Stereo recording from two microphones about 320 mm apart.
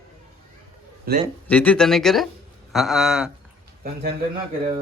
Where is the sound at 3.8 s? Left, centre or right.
Right.